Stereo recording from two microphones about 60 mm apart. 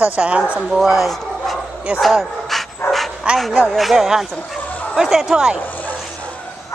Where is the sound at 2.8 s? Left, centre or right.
Left.